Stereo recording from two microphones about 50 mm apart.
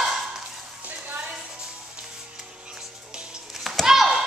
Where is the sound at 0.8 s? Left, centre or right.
Right.